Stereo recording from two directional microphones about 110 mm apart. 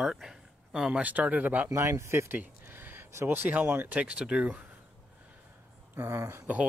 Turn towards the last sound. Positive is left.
turn(degrees=-25)  # may be behind; listen again after turning